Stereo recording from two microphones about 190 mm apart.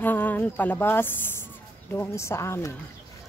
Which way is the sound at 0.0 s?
10° left (ahead or behind).